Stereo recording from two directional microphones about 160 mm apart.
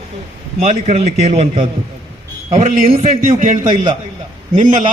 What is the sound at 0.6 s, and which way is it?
A man's voice, 45° right (ahead or behind).